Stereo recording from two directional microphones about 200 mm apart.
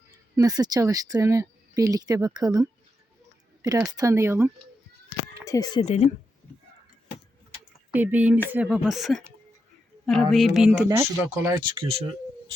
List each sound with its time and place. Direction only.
0.1 s speech: 20° right (ahead or behind)
5.5 s speech: 15° left (ahead or behind)
5.8 s speech: 30° left (ahead or behind)
7.9 s speech: 10° right (ahead or behind); by 11.9 s 25° right (ahead or behind)